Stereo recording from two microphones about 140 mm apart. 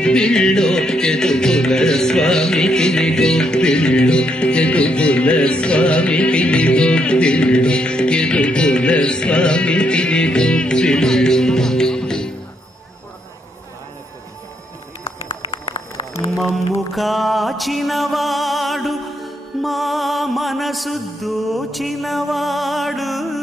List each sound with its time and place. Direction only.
0.0 s music: 5° left (ahead or behind)
15.4 s run: 35° left (ahead or behind)
16.9 s music: centre (ahead or behind)